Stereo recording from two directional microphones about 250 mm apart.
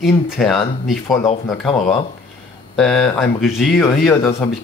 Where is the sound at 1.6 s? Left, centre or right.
Left.